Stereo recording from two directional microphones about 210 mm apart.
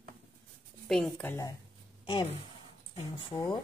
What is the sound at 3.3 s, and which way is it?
Speech, 20° left (ahead or behind).